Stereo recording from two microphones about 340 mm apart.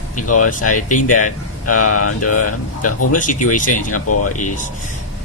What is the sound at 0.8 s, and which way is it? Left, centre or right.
Speech, left.